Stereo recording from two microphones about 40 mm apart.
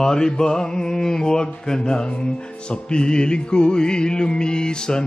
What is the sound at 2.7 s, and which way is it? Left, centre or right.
Music, left.